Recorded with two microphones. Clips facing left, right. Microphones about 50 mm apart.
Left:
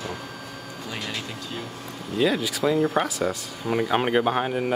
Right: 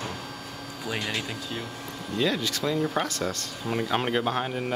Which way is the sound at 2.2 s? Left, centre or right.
Centre.